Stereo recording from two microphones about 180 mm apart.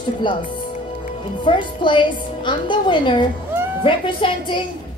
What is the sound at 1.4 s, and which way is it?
A woman's voice, 25° left (ahead or behind).